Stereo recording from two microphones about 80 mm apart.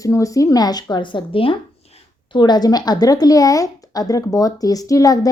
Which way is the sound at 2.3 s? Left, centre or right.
Left.